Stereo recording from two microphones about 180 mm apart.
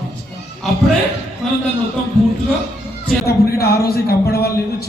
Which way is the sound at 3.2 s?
60° left (ahead or behind).